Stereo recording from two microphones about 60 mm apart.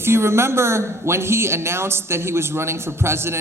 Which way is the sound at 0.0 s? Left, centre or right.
Right.